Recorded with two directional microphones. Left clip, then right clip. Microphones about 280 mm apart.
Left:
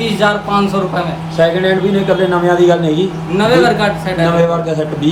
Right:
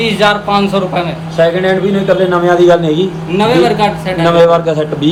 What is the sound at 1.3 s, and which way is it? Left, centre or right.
A man's voice, centre.